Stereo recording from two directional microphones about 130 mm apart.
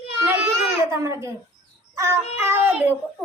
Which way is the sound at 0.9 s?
20° right (ahead or behind).